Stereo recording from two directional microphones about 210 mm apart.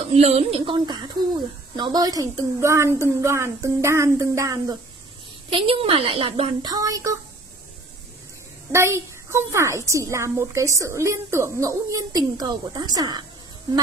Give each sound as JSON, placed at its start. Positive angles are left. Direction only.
{"t": 0.1, "sound": "a woman's voice", "side_deg": -30}
{"t": 8.7, "sound": "a woman's voice", "side_deg": -10}